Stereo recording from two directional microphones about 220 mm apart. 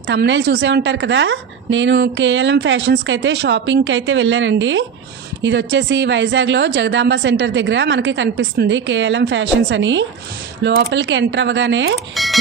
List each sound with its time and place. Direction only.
0.0 s a woman's voice: 55° right (ahead or behind)
12.2 s speech: centre (ahead or behind)